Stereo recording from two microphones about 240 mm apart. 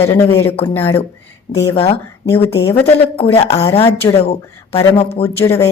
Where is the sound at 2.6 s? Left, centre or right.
Centre.